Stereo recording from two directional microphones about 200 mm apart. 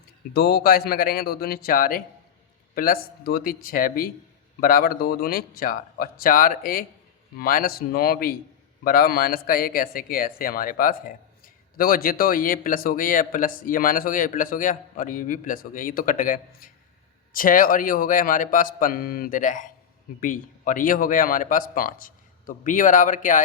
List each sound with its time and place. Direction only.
0.3 s speech: 50° left (ahead or behind)